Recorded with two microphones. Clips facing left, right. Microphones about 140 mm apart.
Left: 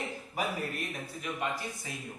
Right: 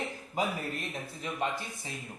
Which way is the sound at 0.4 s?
20° right (ahead or behind).